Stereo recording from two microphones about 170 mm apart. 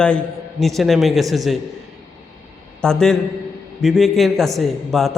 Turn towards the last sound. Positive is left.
turn(degrees=0)  # may be behind; listen again after turning